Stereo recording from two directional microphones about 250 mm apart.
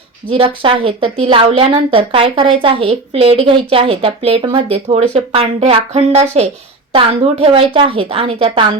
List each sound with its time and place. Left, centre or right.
0.3 s a woman's voice: right